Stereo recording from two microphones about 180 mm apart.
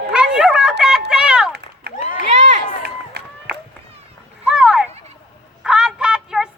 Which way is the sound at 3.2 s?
60° right (ahead or behind).